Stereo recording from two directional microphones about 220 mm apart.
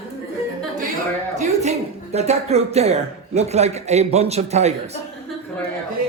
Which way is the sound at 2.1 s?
30° right (ahead or behind).